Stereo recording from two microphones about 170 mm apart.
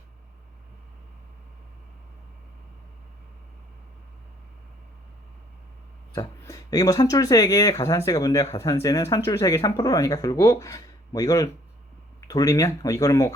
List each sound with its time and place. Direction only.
6.4 s speech: 20° left (ahead or behind)